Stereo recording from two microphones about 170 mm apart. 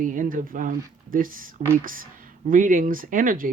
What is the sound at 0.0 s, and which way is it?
Speech, 50° right (ahead or behind).